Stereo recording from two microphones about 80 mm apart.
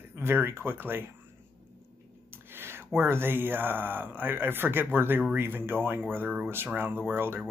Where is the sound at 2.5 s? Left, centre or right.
Right.